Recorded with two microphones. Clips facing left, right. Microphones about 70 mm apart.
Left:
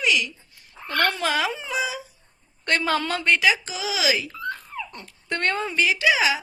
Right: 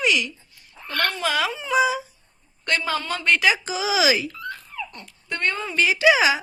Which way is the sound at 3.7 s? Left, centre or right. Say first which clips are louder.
Right 5 dB; centre.